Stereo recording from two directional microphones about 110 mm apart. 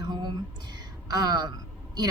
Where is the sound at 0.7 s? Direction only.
40° right (ahead or behind).